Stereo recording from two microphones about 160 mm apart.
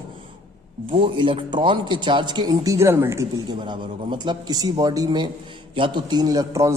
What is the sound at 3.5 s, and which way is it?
A man's voice, 30° right (ahead or behind).